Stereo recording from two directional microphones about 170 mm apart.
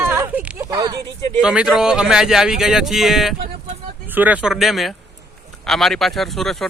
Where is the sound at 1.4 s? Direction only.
5° right (ahead or behind).